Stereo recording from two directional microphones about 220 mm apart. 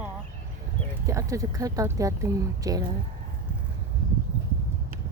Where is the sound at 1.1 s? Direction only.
15° right (ahead or behind).